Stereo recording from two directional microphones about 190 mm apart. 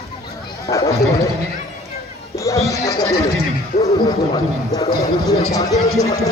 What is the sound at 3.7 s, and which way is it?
Neigh, 35° left (ahead or behind).